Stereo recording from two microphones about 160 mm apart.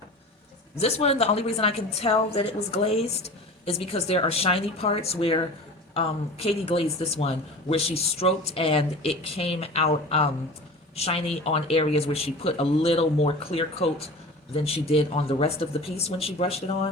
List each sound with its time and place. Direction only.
0.8 s speech: 40° left (ahead or behind)